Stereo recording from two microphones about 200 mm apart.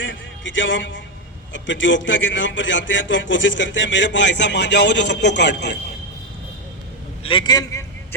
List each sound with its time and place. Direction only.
0.0 s a man's voice: 70° left (ahead or behind)
7.2 s a man's voice: 25° left (ahead or behind)